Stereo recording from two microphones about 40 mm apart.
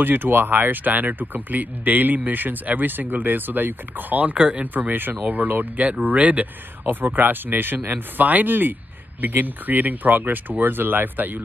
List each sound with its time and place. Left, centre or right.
0.0 s speech: right
4.7 s speech: right
6.9 s speech: right